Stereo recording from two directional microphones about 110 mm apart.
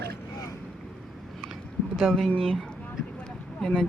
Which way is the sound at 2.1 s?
5° left (ahead or behind).